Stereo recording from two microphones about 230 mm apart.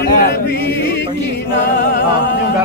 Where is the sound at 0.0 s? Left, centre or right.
Left.